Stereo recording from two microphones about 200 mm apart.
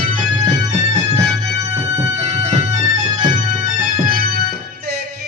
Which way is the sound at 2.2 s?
35° right (ahead or behind).